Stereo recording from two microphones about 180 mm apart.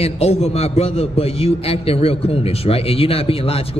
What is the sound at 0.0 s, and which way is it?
A man's voice, 35° left (ahead or behind).